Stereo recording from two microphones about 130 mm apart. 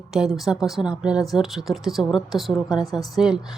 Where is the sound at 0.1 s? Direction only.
Centre (ahead or behind).